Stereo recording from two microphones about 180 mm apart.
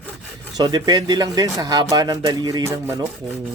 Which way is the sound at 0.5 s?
20° right (ahead or behind).